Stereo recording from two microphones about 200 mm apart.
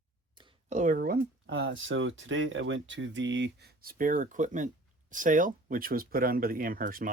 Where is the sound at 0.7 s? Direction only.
40° right (ahead or behind).